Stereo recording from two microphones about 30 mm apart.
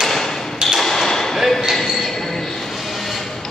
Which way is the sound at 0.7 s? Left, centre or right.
Centre.